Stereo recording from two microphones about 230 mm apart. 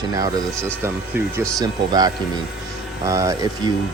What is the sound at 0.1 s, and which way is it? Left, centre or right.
Speech, centre.